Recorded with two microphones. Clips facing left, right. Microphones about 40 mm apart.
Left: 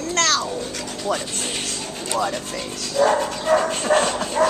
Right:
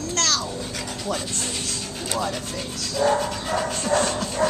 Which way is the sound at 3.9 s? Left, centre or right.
Left.